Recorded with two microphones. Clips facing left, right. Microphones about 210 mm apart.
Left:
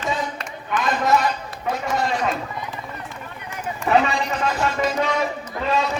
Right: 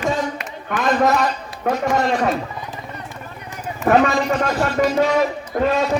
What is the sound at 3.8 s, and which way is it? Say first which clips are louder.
Speech: right 4 dB; 45° right (ahead or behind).